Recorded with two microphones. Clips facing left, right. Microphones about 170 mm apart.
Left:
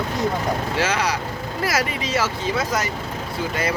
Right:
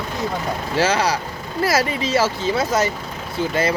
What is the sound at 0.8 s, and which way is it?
Speech, 30° right (ahead or behind).